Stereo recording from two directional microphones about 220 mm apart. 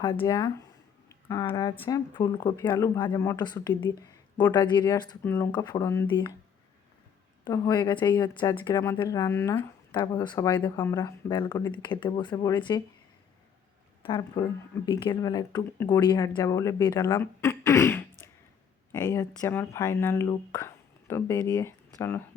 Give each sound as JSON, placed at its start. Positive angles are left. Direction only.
{"t": 0.0, "sound": "speech", "side_deg": 20}
{"t": 7.4, "sound": "speech", "side_deg": 20}
{"t": 14.0, "sound": "speech", "side_deg": 20}